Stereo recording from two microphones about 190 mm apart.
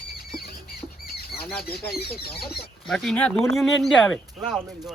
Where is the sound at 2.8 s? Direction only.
5° left (ahead or behind).